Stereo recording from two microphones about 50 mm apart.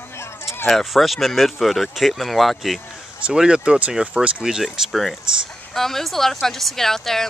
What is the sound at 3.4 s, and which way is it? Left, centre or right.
Speech, centre.